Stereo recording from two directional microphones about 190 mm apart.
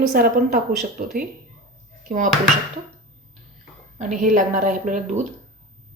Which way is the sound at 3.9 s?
40° right (ahead or behind).